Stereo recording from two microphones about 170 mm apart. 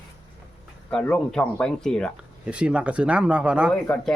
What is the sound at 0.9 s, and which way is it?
Speech, 5° left (ahead or behind).